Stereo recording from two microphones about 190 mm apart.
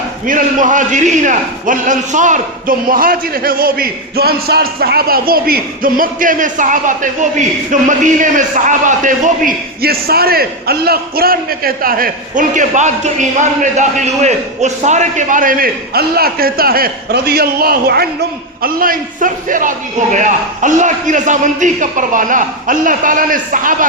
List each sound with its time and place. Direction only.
0.3 s a man's voice: 45° right (ahead or behind)